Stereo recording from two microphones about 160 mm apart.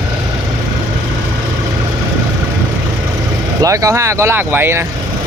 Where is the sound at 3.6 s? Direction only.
20° right (ahead or behind).